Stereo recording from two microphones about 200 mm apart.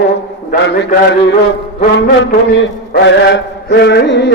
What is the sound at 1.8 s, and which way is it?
Mantra, 55° left (ahead or behind).